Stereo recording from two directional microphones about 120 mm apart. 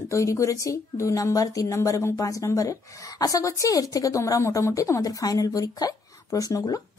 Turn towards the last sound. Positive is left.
turn(degrees=30)  # may be behind; listen again after turning